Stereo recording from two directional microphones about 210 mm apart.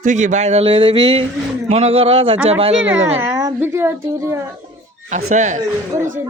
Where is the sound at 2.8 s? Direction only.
65° right (ahead or behind).